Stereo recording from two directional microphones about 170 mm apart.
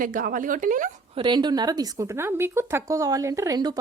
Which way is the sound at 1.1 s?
25° right (ahead or behind).